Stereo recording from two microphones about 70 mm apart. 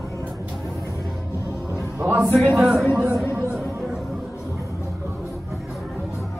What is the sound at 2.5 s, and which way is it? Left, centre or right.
Speech, centre.